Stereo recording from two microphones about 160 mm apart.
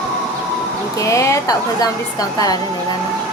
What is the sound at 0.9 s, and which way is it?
Speech, 20° left (ahead or behind).